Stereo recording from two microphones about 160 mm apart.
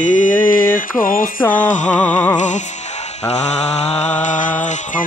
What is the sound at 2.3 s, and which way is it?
Music, 50° left (ahead or behind).